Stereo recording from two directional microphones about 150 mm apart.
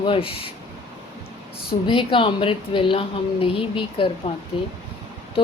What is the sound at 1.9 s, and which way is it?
Speech, 35° left (ahead or behind).